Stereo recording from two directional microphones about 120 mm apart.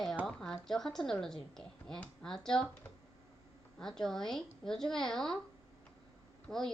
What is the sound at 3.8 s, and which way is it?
A woman's voice, 5° left (ahead or behind).